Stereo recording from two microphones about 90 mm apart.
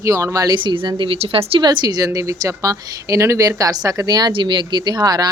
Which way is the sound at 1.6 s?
50° right (ahead or behind).